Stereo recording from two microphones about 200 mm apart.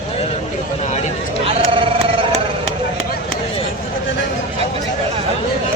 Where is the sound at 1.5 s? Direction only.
25° right (ahead or behind).